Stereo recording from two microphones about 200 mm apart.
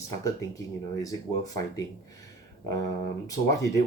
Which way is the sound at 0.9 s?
15° left (ahead or behind).